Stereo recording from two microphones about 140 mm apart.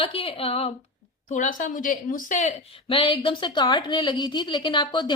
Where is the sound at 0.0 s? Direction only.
45° left (ahead or behind).